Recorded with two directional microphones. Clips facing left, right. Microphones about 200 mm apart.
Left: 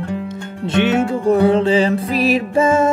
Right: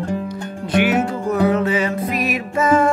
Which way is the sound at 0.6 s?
25° left (ahead or behind).